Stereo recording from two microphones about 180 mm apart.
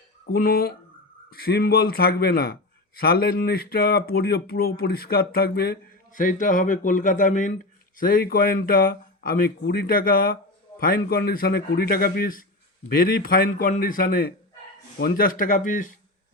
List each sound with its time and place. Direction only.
0.3 s a man's voice: 55° left (ahead or behind)
6.1 s a man's voice: 45° left (ahead or behind)